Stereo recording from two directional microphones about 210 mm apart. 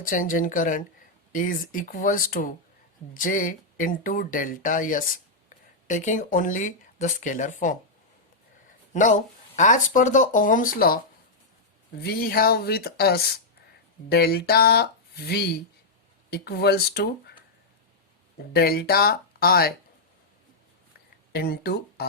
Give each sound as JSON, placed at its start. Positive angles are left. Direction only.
{"t": 0.0, "sound": "speech", "side_deg": 40}
{"t": 8.9, "sound": "speech", "side_deg": 35}
{"t": 12.0, "sound": "speech", "side_deg": 45}
{"t": 18.5, "sound": "speech", "side_deg": 50}
{"t": 21.3, "sound": "speech", "side_deg": 50}